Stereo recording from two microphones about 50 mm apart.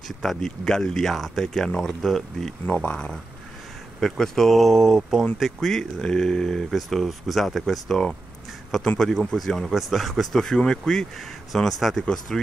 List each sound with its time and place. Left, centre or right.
0.2 s speech: centre
2.6 s speech: left
4.0 s speech: centre
10.5 s speech: centre
11.1 s speech: centre
12.0 s speech: centre